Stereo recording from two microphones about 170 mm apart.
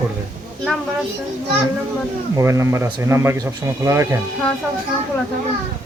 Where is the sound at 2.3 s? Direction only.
15° right (ahead or behind).